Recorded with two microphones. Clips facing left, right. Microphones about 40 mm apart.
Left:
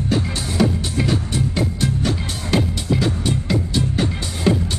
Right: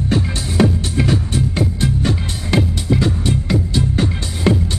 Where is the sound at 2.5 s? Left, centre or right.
Centre.